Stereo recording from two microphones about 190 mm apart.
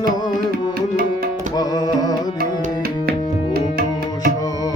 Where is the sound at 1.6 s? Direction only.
20° left (ahead or behind).